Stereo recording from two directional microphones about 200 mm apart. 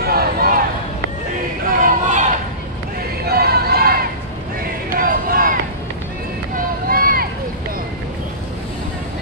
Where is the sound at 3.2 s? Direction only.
50° right (ahead or behind).